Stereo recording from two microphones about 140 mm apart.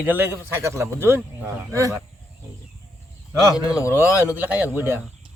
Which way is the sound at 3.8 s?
20° left (ahead or behind).